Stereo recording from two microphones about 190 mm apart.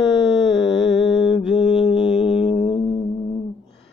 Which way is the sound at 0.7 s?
70° left (ahead or behind).